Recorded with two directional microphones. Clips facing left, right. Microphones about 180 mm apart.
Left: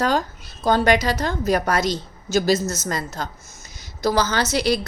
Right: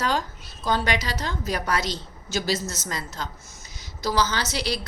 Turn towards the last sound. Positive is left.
turn(degrees=50)  # may be behind; listen again after turning